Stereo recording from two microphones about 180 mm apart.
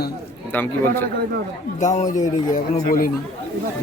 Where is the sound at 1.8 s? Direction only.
45° left (ahead or behind).